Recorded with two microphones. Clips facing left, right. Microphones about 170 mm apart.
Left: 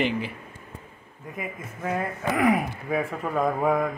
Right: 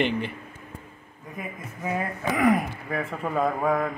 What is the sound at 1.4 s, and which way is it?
A man's voice, centre (ahead or behind).